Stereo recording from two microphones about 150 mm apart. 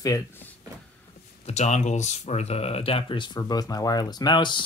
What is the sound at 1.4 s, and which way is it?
Speech, 50° left (ahead or behind).